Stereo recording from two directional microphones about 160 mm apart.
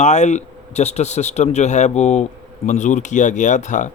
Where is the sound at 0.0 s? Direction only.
45° left (ahead or behind).